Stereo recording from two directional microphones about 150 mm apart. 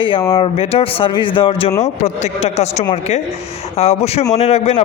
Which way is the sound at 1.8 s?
45° left (ahead or behind).